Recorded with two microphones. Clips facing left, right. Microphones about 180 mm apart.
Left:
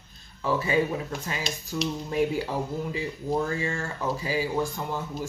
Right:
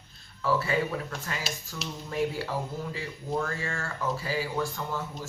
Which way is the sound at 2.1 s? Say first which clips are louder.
Left 2 dB; 15° left (ahead or behind).